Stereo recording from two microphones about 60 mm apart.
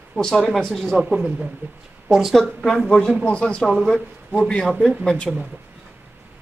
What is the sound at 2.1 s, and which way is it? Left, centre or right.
Speech, centre.